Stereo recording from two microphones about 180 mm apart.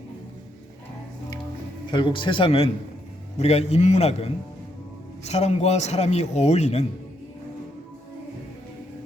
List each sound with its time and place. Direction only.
1.9 s speech: 25° left (ahead or behind)